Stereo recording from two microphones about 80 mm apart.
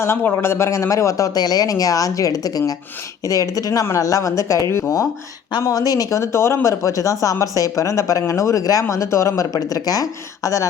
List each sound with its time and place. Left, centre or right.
0.0 s speech: left
5.6 s speech: left